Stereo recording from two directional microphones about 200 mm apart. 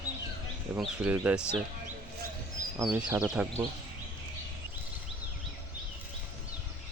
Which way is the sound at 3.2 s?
5° right (ahead or behind).